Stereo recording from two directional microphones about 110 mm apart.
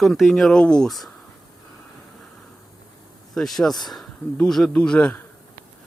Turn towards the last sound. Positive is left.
turn(degrees=10)  # may be behind; listen again after turning